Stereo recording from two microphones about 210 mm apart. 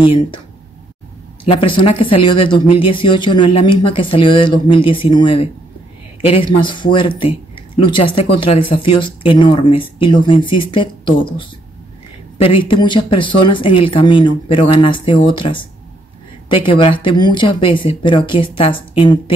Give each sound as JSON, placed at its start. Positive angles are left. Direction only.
{"t": 1.4, "sound": "speech", "side_deg": 25}
{"t": 12.4, "sound": "speech", "side_deg": 25}